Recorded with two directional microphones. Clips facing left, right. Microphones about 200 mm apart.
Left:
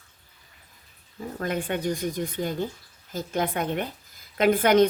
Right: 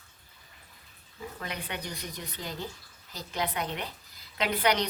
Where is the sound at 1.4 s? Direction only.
50° left (ahead or behind).